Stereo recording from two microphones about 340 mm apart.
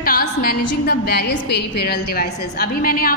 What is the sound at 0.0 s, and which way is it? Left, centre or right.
A woman's voice, left.